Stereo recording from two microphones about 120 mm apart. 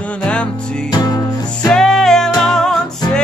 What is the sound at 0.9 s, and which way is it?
Music, 35° left (ahead or behind).